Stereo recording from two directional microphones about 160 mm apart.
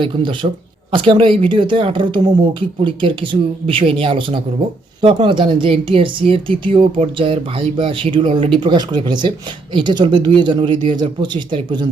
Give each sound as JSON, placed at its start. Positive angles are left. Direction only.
{"t": 0.0, "sound": "speech", "side_deg": -30}